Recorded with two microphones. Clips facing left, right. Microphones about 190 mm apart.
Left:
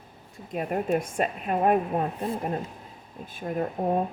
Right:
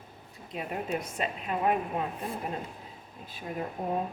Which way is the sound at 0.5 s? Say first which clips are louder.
Left 7 dB; 50° left (ahead or behind).